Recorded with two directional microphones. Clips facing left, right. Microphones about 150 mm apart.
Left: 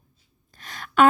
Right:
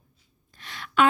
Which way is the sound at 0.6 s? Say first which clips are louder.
Left 3 dB; 45° left (ahead or behind).